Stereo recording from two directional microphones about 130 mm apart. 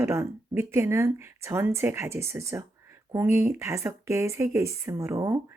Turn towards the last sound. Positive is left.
turn(degrees=-20)  # may be behind; listen again after turning